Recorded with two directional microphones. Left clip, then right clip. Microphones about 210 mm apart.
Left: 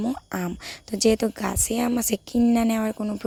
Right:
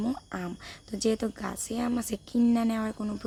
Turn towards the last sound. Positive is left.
turn(degrees=25)  # may be behind; listen again after turning